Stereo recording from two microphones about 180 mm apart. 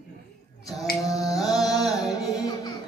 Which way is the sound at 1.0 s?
20° left (ahead or behind).